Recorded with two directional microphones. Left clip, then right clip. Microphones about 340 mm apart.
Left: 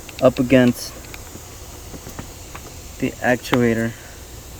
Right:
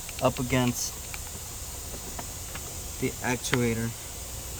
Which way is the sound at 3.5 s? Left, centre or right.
Centre.